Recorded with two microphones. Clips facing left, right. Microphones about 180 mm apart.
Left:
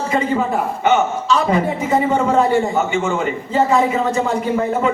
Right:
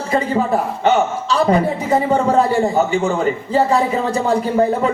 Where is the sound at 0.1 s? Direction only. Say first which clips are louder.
Right 3 dB; 35° right (ahead or behind).